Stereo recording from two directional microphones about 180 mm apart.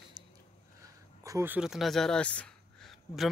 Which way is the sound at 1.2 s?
15° right (ahead or behind).